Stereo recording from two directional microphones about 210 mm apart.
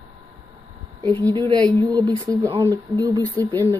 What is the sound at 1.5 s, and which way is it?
Speech, 20° right (ahead or behind).